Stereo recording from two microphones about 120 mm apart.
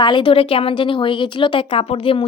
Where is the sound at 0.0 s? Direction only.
40° left (ahead or behind).